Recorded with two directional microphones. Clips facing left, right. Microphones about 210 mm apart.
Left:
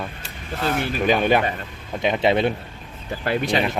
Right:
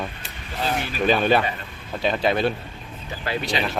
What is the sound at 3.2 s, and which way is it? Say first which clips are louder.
Speech: left 4 dB; 50° left (ahead or behind).